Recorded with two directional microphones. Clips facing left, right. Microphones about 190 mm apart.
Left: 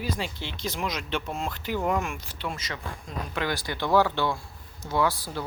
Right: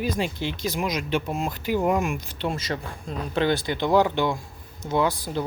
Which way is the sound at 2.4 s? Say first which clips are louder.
Right 6 dB; 30° right (ahead or behind).